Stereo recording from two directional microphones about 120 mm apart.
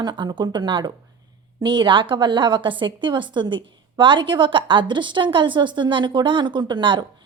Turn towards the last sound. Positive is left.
turn(degrees=-40)  # may be behind; listen again after turning